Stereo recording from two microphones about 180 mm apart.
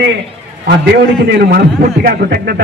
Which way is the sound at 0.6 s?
70° right (ahead or behind).